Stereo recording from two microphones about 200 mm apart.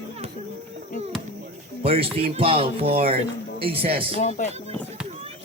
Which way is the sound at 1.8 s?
30° right (ahead or behind).